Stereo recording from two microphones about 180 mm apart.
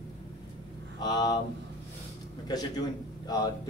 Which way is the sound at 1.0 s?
25° left (ahead or behind).